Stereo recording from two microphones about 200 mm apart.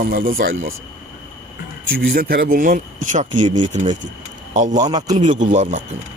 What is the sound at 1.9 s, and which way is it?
Speech, 45° right (ahead or behind).